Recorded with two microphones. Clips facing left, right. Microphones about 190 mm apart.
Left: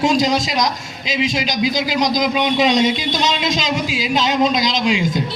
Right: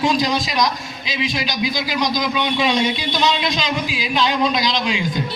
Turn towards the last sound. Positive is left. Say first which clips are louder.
# left 2 dB
turn(degrees=45)  # may be behind; listen again after turning